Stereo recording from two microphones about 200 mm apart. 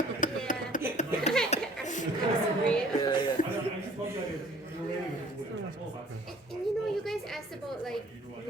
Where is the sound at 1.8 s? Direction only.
40° left (ahead or behind).